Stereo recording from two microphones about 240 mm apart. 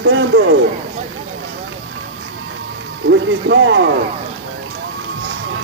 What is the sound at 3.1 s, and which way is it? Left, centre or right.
Speech, right.